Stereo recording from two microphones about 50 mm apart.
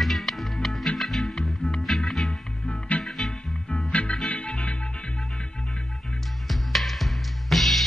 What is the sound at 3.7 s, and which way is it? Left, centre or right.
Music, left.